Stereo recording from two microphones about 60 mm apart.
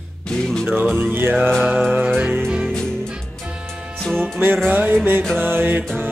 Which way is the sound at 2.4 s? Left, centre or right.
Centre.